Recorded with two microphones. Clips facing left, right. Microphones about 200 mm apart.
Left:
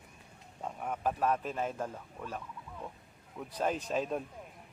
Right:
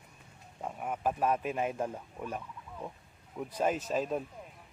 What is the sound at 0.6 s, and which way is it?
A man's voice, 5° right (ahead or behind).